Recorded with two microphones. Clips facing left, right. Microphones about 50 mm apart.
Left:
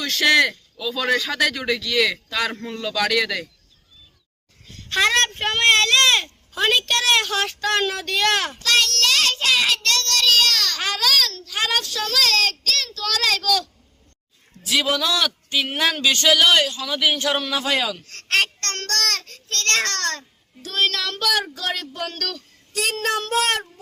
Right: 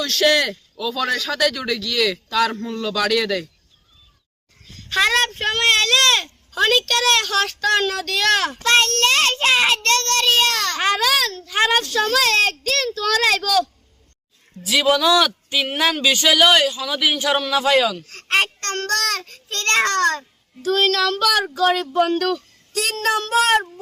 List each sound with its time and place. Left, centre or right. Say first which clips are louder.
0.0 s a man's voice: even; centre
2.5 s speech: right 4 dB; left
2.8 s speech: right 1 dB; centre
4.6 s speech: right 1 dB; centre
8.6 s child singing: right 4 dB; right; by 11.5 s centre
11.7 s a child's voice: right 5 dB; centre
22.7 s speech: right 2 dB; centre